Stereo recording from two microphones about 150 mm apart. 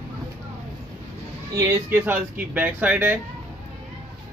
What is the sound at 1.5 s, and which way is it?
Speech, 15° right (ahead or behind).